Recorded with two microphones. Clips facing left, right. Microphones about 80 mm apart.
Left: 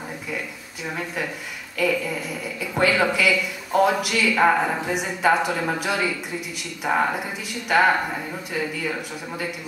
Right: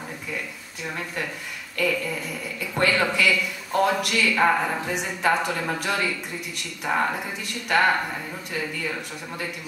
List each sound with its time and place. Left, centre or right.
0.8 s speech: centre